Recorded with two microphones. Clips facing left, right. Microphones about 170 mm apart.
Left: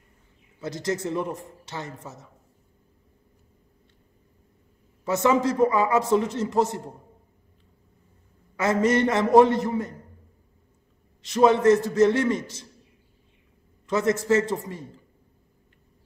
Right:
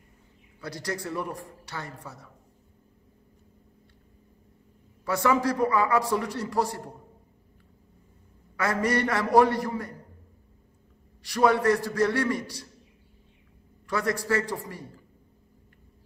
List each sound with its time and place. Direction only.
0.6 s a man's voice: 20° left (ahead or behind)
5.0 s a man's voice: 20° left (ahead or behind)
8.5 s a man's voice: 20° left (ahead or behind)
11.2 s a man's voice: 20° left (ahead or behind)
13.8 s a man's voice: 20° left (ahead or behind)